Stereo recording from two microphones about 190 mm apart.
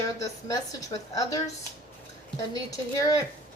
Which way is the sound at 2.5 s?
20° left (ahead or behind).